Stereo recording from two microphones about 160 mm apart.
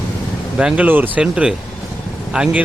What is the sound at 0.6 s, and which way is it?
Speech, 5° right (ahead or behind).